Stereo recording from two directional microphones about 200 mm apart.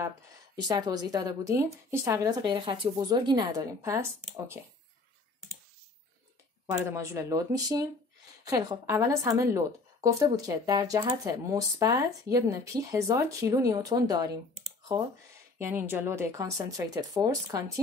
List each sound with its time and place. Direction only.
0.6 s a woman's voice: 20° right (ahead or behind)
6.9 s speech: 15° right (ahead or behind)
15.6 s speech: 10° right (ahead or behind)